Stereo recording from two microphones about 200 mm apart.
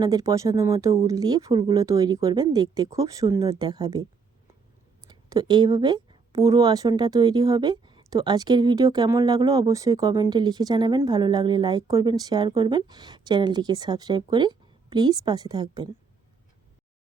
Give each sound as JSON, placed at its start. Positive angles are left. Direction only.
{"t": 0.0, "sound": "speech", "side_deg": -15}
{"t": 5.0, "sound": "speech", "side_deg": -20}